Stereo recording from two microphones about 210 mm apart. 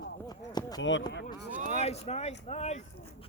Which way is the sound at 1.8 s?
30° left (ahead or behind).